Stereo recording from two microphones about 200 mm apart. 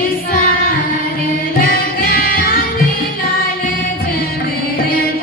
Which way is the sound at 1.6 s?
45° left (ahead or behind).